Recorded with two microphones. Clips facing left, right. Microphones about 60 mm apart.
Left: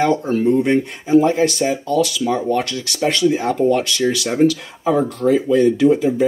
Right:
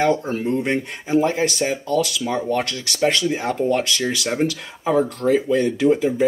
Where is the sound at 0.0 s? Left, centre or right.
Centre.